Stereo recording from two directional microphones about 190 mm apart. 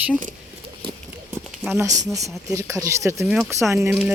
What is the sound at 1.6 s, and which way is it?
Speech, 10° right (ahead or behind).